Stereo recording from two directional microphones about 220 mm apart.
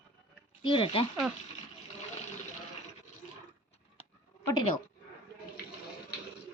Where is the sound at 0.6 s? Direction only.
20° left (ahead or behind).